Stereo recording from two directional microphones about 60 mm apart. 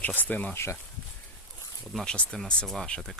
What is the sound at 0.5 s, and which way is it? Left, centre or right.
Speech, left.